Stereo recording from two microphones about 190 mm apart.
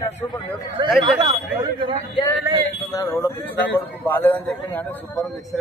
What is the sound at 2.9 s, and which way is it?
A man's voice, 15° left (ahead or behind).